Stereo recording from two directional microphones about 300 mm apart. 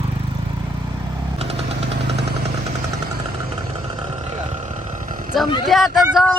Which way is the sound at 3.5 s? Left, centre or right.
Centre.